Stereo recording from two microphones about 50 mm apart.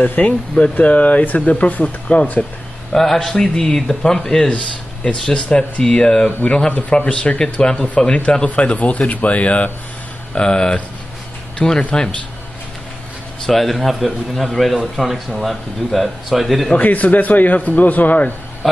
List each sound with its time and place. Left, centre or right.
0.0 s speech: left
2.9 s speech: centre
13.5 s speech: centre
16.7 s speech: left